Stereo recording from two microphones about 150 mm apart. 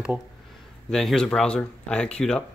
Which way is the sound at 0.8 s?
5° left (ahead or behind).